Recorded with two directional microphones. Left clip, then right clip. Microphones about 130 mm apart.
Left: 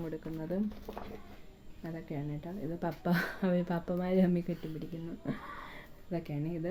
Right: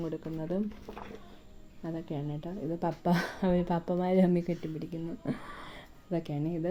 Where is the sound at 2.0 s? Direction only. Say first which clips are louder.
Right 3 dB; 35° right (ahead or behind).